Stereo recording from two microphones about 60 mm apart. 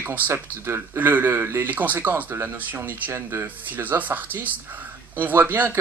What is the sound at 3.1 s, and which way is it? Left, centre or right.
Speech, right.